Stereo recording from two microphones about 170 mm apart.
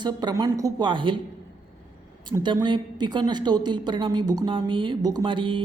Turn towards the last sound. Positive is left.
turn(degrees=-30)  # may be behind; listen again after turning